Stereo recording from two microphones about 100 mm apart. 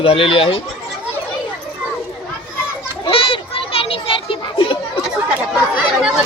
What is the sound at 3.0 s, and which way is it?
Children playing, 60° left (ahead or behind).